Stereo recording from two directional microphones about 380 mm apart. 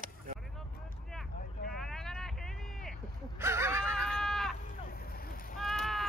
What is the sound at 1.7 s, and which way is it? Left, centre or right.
Vehicle, centre.